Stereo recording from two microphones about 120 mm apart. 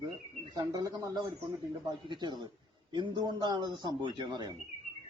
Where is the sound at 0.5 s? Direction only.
30° right (ahead or behind).